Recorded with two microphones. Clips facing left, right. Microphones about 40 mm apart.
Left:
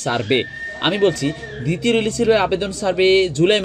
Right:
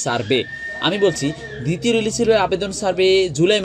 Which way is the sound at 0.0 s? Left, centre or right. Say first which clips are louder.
Even; centre.